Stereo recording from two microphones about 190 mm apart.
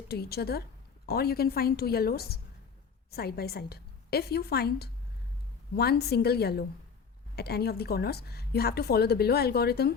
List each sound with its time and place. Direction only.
0.1 s a woman's voice: 55° left (ahead or behind)